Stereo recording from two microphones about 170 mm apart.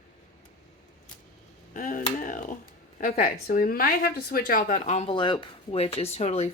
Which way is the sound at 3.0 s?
50° left (ahead or behind).